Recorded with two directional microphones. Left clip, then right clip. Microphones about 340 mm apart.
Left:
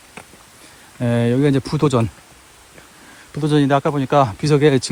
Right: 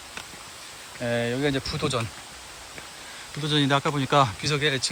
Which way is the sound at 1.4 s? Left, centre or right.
Centre.